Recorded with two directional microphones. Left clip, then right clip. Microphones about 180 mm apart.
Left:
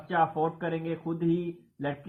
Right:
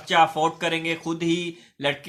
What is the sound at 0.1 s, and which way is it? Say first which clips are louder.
Speech: right 7 dB; 20° right (ahead or behind).